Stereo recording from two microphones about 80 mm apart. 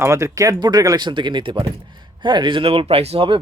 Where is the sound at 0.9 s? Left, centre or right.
Right.